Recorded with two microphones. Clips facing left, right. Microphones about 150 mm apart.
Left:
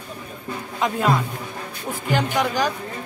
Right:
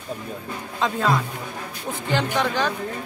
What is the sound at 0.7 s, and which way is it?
Speech, 15° left (ahead or behind).